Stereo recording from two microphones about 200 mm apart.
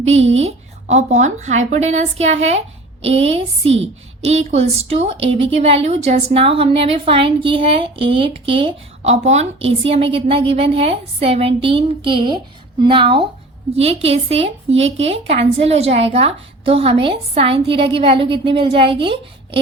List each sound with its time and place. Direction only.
0.0 s a woman's voice: 30° right (ahead or behind)